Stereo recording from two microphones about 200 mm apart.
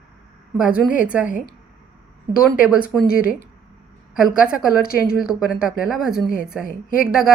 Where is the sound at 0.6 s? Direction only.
5° right (ahead or behind).